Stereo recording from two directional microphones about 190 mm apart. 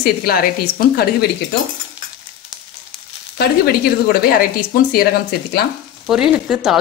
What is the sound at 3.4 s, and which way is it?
Speech, 55° left (ahead or behind).